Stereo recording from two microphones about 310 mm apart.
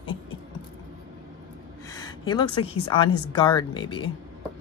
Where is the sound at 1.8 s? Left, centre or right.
Centre.